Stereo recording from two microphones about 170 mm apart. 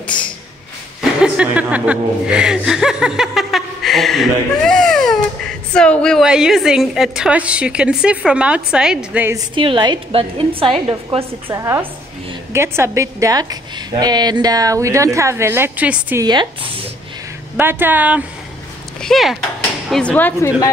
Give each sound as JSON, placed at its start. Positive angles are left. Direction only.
{"t": 0.0, "sound": "a sound", "side_deg": 5}
{"t": 1.2, "sound": "speech", "side_deg": -5}
{"t": 9.6, "sound": "a woman's voice", "side_deg": -30}
{"t": 11.4, "sound": "a woman's voice", "side_deg": -15}
{"t": 16.2, "sound": "speech", "side_deg": -25}
{"t": 17.6, "sound": "a woman's voice", "side_deg": -10}